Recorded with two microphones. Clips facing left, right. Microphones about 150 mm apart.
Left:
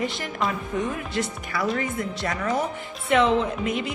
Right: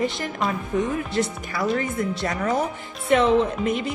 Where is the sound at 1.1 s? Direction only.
35° right (ahead or behind).